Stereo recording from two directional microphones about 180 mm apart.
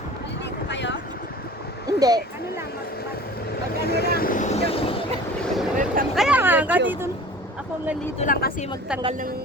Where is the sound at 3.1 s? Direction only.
60° left (ahead or behind); by 5.0 s 30° left (ahead or behind).